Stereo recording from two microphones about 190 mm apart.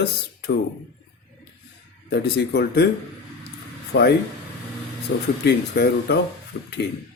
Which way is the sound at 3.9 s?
60° left (ahead or behind).